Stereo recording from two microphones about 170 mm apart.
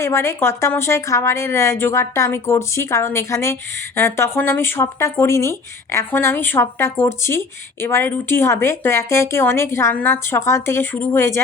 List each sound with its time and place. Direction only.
0.0 s a woman's voice: 15° left (ahead or behind)